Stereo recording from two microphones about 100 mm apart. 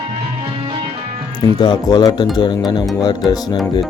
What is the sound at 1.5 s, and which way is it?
Speech, 45° left (ahead or behind).